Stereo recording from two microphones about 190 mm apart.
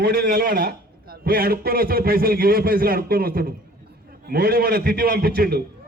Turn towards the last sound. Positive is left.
turn(degrees=-50)  # may be behind; listen again after turning